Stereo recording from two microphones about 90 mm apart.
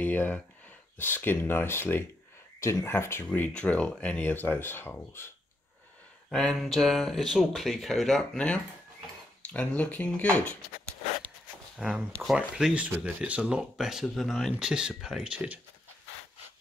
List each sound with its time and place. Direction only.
0.0 s a sound: 20° left (ahead or behind)
0.9 s speech: 25° left (ahead or behind)
6.3 s speech: centre (ahead or behind)
11.8 s speech: 5° right (ahead or behind)
12.1 s speech: 5° left (ahead or behind)
12.4 s speech: 10° right (ahead or behind)